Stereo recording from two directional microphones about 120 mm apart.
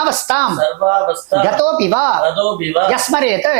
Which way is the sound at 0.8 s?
30° right (ahead or behind).